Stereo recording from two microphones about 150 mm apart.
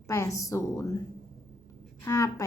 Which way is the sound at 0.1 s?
20° left (ahead or behind).